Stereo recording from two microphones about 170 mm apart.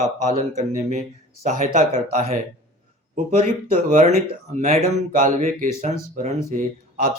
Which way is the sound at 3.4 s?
45° right (ahead or behind).